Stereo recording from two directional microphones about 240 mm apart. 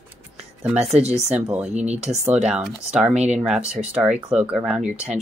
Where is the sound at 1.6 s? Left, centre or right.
Right.